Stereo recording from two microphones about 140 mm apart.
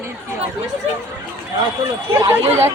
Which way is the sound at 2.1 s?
20° right (ahead or behind).